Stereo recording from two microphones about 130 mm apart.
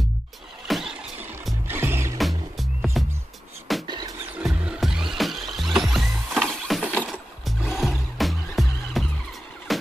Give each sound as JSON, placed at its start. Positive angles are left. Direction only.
{"t": 0.7, "sound": "vehicle", "side_deg": 0}
{"t": 1.7, "sound": "music", "side_deg": -15}
{"t": 2.1, "sound": "music", "side_deg": 0}
{"t": 3.8, "sound": "music", "side_deg": -35}
{"t": 4.4, "sound": "music", "side_deg": -5}